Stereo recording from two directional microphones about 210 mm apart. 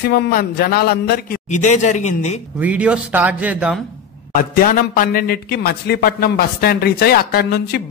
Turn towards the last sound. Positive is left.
turn(degrees=50)  # may be behind; listen again after turning